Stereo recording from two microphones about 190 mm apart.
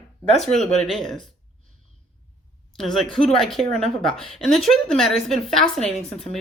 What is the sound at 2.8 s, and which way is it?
A woman's voice, centre (ahead or behind).